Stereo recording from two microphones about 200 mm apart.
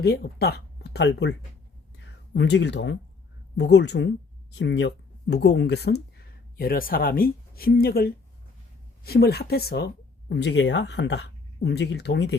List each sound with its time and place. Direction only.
0.0 s speech: 50° left (ahead or behind)